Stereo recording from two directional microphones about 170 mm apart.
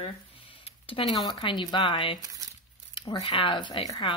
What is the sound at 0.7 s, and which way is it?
Speech, 30° left (ahead or behind).